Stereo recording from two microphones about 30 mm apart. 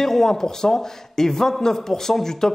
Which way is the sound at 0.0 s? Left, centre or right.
Centre.